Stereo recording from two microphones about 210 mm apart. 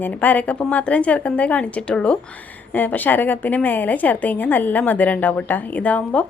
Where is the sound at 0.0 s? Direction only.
10° left (ahead or behind).